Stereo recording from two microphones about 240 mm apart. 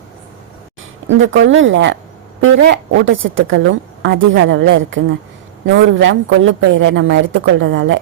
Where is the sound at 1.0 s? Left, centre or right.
Right.